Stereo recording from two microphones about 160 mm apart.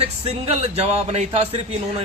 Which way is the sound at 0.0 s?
40° right (ahead or behind).